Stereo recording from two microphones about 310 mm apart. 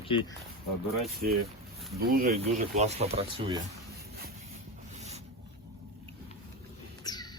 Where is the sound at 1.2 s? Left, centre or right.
Right.